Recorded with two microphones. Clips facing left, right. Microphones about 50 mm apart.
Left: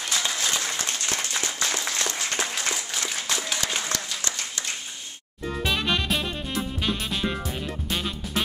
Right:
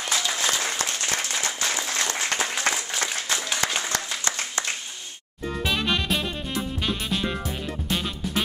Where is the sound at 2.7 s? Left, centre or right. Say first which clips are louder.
Right 3 dB; right.